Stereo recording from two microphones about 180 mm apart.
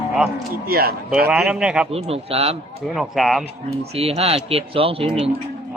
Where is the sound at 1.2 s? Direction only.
5° right (ahead or behind).